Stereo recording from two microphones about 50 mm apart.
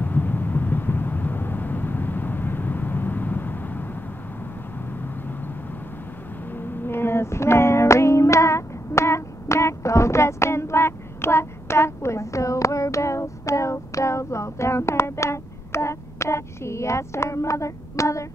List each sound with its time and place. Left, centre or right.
0.0 s vehicle: left
6.5 s female singing: left